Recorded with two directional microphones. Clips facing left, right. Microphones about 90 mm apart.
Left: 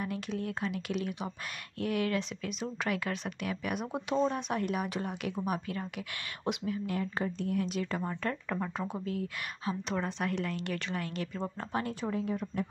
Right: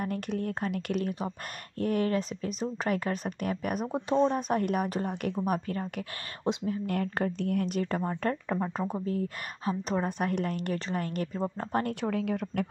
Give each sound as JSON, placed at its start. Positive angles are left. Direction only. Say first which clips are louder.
{"t": 0.0, "sound": "a woman's voice", "louder": "right 3 dB", "side_deg": -50}
{"t": 6.9, "sound": "a woman's voice", "louder": "right 4 dB", "side_deg": -55}
{"t": 8.5, "sound": "speech", "louder": "right 4 dB", "side_deg": -25}
{"t": 9.0, "sound": "a woman's voice", "louder": "right 4 dB", "side_deg": -40}
{"t": 11.7, "sound": "a woman's voice", "louder": "right 3 dB", "side_deg": -60}